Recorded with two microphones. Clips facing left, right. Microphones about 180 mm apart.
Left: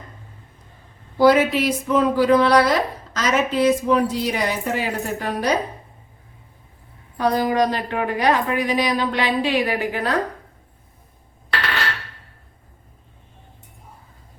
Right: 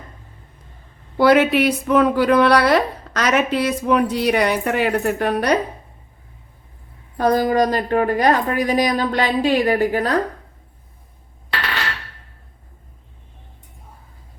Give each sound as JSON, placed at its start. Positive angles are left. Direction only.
{"t": 1.1, "sound": "a woman's voice", "side_deg": -65}
{"t": 7.2, "sound": "speech", "side_deg": -45}